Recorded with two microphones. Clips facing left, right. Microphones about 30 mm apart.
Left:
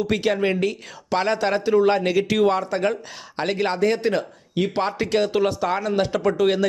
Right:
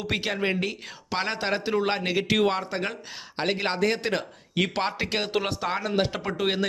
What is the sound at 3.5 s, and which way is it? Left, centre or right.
Speech, right.